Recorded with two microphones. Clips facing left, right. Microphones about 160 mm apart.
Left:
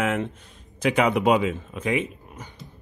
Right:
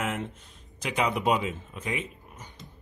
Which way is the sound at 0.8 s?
65° left (ahead or behind).